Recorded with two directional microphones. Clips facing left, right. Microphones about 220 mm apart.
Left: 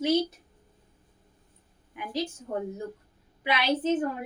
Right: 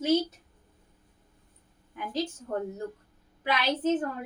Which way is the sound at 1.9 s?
15° left (ahead or behind).